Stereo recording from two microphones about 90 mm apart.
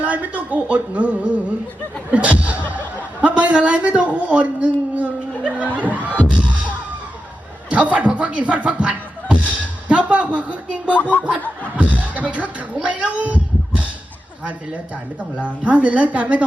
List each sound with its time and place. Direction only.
0.0 s a man's voice: 15° right (ahead or behind)
5.4 s chuckle: 15° right (ahead or behind)
5.7 s a man's voice: 15° right (ahead or behind)
7.7 s speech: 15° right (ahead or behind)
10.9 s speech: 20° left (ahead or behind)
11.2 s a man's voice: 15° right (ahead or behind)
15.4 s a man's voice: 15° right (ahead or behind)